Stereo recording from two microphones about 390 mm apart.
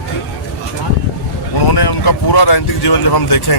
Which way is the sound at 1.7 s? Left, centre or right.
Left.